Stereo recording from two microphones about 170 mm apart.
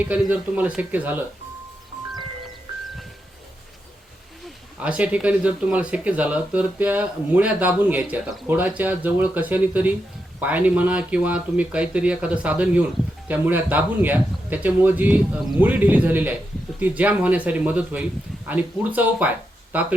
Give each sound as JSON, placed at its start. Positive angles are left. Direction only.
{"t": 0.0, "sound": "speech", "side_deg": -10}
{"t": 4.8, "sound": "speech", "side_deg": -5}